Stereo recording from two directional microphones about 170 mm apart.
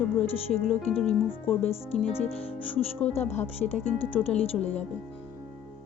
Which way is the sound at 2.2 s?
35° left (ahead or behind).